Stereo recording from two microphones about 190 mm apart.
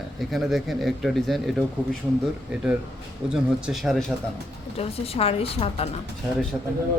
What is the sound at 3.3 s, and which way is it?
Speech, centre (ahead or behind).